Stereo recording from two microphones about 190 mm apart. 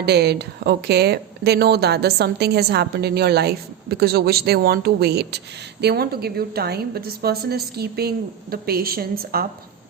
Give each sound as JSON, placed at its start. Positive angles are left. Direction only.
{"t": 0.0, "sound": "speech", "side_deg": -60}